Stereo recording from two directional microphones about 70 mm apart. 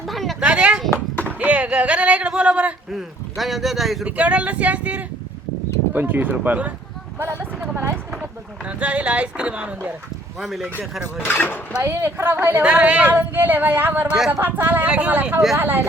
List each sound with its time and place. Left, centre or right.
0.1 s a sound: centre
0.3 s a sound: centre
1.2 s speech: right
2.9 s speech: centre
4.0 s speech: centre; by 7.9 s right
8.2 s speech: centre
10.4 s speech: centre
11.2 s speech: left
11.8 s speech: right
12.6 s speech: centre
14.8 s speech: centre
15.5 s speech: right